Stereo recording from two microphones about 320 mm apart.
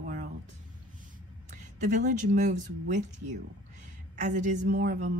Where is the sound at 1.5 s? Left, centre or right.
Right.